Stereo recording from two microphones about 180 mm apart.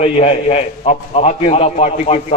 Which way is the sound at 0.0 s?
35° left (ahead or behind).